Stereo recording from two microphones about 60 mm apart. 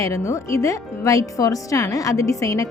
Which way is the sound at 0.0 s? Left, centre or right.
Left.